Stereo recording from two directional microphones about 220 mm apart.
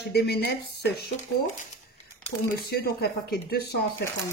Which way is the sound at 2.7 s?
45° left (ahead or behind).